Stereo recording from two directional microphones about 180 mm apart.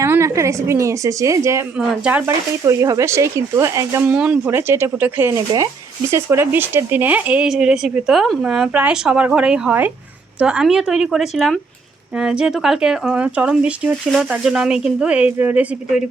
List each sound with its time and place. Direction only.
0.0 s a woman's voice: 15° right (ahead or behind)
2.6 s speech: 20° right (ahead or behind)